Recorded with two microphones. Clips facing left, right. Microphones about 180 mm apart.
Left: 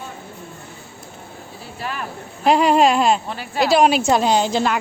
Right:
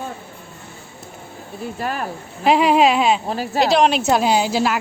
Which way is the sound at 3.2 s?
40° right (ahead or behind).